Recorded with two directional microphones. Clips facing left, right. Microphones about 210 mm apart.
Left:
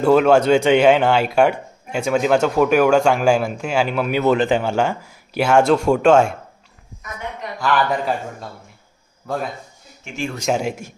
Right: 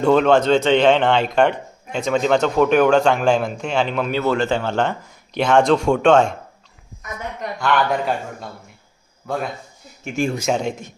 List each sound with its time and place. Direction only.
0.0 s speech: 5° left (ahead or behind)
7.6 s a man's voice: centre (ahead or behind)
10.0 s speech: 40° right (ahead or behind)
10.5 s speech: 5° left (ahead or behind)